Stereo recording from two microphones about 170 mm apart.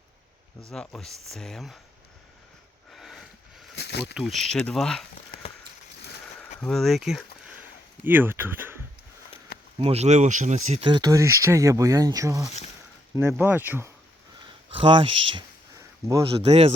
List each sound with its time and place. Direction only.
0.7 s speech: centre (ahead or behind)
2.9 s a sound: centre (ahead or behind)
3.8 s insect: 80° left
4.0 s speech: centre (ahead or behind)
6.4 s speech: 5° left (ahead or behind); by 8.7 s 10° right (ahead or behind)
9.8 s speech: 40° right (ahead or behind)
10.8 s speech: 25° right (ahead or behind)
13.4 s speech: 10° right (ahead or behind)
14.4 s a man's voice: 30° right (ahead or behind)